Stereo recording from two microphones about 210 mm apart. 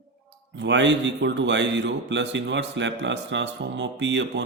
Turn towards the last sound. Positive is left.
turn(degrees=-60)  # may be behind; listen again after turning